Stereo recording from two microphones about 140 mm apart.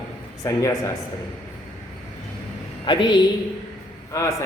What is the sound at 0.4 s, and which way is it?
Speech, 20° left (ahead or behind).